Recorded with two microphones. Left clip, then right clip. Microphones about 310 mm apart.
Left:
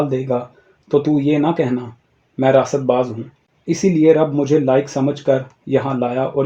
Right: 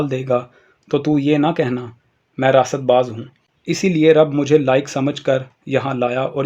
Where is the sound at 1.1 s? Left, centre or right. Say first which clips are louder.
Even; right.